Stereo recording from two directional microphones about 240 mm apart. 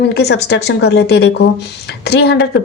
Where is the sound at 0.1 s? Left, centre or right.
Left.